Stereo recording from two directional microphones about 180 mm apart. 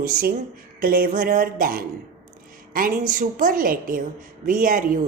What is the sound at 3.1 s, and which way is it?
A woman's voice, 50° right (ahead or behind).